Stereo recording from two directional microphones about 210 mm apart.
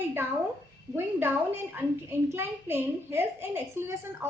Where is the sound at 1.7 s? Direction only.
10° right (ahead or behind).